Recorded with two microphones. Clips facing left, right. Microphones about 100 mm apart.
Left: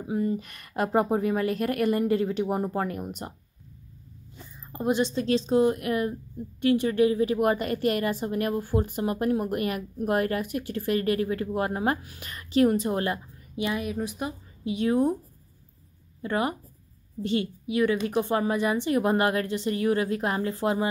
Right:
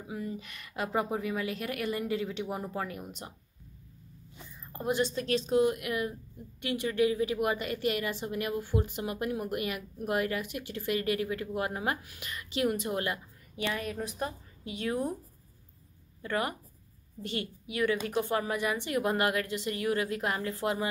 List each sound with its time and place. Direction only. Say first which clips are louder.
0.1 s a woman's voice: left 10 dB; 45° left (ahead or behind)
4.7 s a woman's voice: left 5 dB; 20° left (ahead or behind)
13.6 s speech: left 5 dB; 15° left (ahead or behind)
14.6 s a woman's voice: left 9 dB; 25° left (ahead or behind)
16.2 s a woman's voice: left 5 dB; 25° left (ahead or behind)